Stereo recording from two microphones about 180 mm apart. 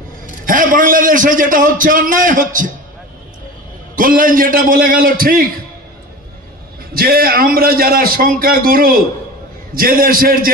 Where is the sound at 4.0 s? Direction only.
50° right (ahead or behind).